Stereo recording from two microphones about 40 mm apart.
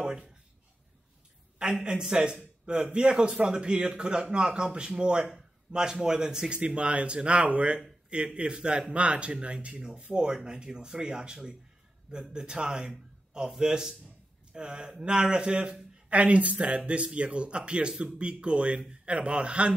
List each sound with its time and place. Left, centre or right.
0.0 s a sound: right
1.6 s a man's voice: centre
6.5 s a man's voice: right
16.1 s a man's voice: right